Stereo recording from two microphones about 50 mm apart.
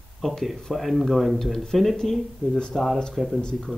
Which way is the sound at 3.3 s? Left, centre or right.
Centre.